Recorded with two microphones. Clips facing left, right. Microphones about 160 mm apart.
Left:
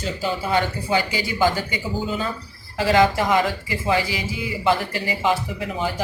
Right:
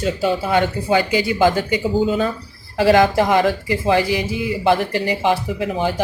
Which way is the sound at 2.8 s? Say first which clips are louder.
Right 4 dB; 65° right (ahead or behind).